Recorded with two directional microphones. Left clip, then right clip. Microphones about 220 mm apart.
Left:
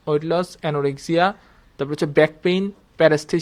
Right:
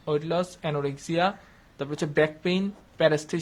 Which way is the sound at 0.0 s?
30° left (ahead or behind).